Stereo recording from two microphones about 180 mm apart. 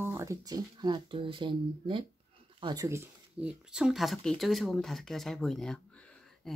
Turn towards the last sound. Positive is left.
turn(degrees=5)  # may be behind; listen again after turning